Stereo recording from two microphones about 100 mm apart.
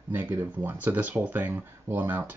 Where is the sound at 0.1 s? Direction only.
20° right (ahead or behind).